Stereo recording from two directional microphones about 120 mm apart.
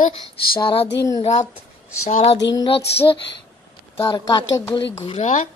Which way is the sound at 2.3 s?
35° left (ahead or behind).